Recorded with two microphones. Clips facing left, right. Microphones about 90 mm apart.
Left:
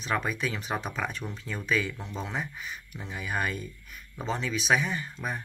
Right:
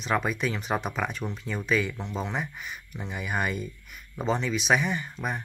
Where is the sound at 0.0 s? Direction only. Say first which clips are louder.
Right 3 dB; centre (ahead or behind).